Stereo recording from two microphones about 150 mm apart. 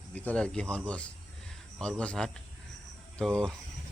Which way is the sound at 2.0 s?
10° left (ahead or behind).